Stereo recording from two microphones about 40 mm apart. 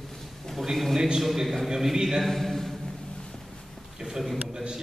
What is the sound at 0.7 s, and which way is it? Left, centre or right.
A man's voice, centre.